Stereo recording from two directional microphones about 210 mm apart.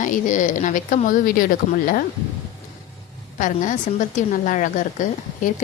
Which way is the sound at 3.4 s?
35° left (ahead or behind).